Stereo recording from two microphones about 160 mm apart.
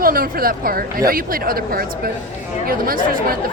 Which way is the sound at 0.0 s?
65° right (ahead or behind).